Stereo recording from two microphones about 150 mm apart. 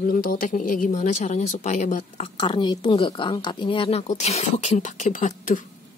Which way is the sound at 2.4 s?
30° left (ahead or behind).